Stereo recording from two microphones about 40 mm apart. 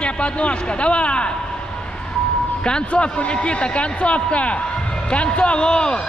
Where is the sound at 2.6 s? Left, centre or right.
Left.